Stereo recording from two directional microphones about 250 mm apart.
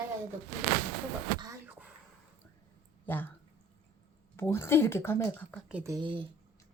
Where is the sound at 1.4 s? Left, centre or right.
Centre.